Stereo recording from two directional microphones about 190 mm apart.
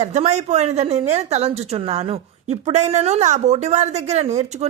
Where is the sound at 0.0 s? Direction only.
35° right (ahead or behind).